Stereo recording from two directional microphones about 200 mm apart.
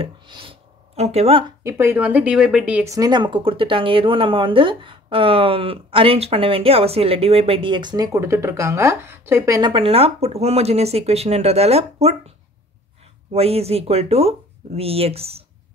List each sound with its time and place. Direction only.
0.0 s a sound: 25° right (ahead or behind)
1.6 s a woman's voice: 15° right (ahead or behind); by 12.2 s 30° right (ahead or behind)
13.3 s a woman's voice: 30° right (ahead or behind)